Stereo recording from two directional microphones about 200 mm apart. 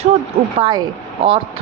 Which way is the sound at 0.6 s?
25° right (ahead or behind).